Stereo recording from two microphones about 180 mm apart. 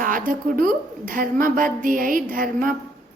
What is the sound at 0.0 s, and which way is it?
A woman's voice, 50° right (ahead or behind).